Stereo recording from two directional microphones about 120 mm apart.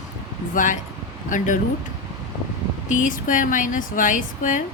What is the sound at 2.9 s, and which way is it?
A woman's voice, 90° left.